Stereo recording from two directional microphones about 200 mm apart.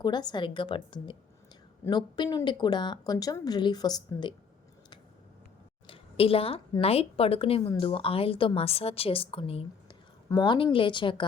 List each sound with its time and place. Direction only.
0.0 s speech: 20° left (ahead or behind)
5.9 s a woman's voice: 30° left (ahead or behind)